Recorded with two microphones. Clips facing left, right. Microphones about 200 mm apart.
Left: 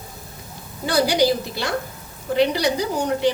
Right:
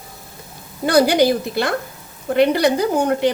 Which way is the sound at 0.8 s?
55° right (ahead or behind).